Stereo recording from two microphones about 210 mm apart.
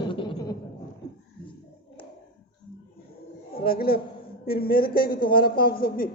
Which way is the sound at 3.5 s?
45° left (ahead or behind).